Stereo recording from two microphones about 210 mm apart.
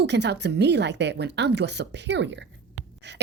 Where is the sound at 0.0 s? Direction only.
55° right (ahead or behind).